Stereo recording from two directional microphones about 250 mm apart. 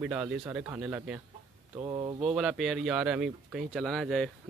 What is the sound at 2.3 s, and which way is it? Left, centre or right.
Speech, centre.